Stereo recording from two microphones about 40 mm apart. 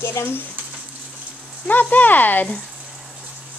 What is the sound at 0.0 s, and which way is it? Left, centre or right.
Speech, left.